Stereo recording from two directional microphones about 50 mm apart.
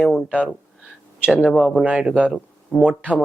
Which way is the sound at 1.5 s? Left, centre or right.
Centre.